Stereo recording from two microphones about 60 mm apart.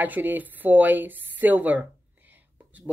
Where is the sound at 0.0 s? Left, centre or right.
Right.